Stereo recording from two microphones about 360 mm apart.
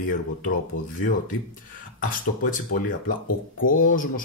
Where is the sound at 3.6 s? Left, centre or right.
Left.